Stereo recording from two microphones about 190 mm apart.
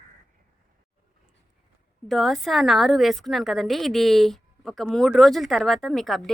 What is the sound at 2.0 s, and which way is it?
A woman's voice, centre (ahead or behind).